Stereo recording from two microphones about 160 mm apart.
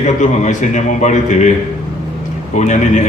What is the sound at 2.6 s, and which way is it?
Speech, 50° left (ahead or behind).